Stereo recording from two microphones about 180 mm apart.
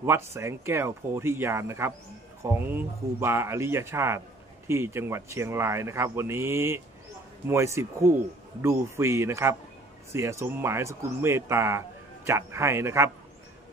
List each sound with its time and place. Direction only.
0.0 s speech: 15° right (ahead or behind)